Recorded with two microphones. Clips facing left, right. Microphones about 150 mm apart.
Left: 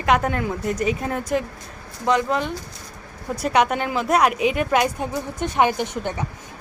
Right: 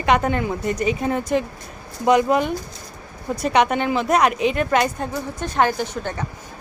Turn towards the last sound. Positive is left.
turn(degrees=20)  # may be behind; listen again after turning